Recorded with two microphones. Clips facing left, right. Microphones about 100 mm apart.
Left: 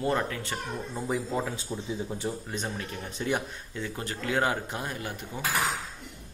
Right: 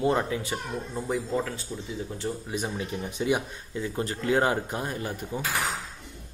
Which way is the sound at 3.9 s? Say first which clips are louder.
Right 5 dB; 30° right (ahead or behind).